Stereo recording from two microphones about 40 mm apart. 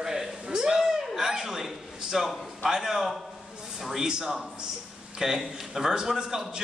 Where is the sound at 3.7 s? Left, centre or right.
Centre.